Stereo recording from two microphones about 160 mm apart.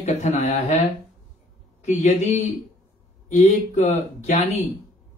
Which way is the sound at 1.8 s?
45° left (ahead or behind).